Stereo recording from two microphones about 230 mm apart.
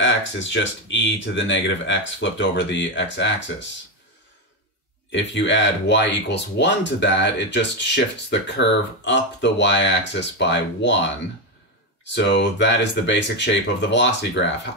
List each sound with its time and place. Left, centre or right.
0.0 s speech: left
5.1 s speech: left
12.0 s speech: left